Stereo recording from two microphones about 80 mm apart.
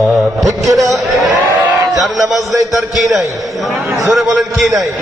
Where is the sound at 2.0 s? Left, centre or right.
Centre.